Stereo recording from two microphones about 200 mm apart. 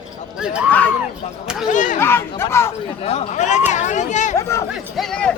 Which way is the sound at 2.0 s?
10° left (ahead or behind).